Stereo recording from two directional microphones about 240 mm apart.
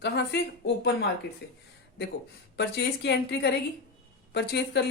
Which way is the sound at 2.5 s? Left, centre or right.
Left.